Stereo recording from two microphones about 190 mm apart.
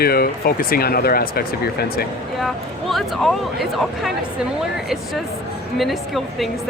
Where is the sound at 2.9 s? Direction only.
Centre (ahead or behind).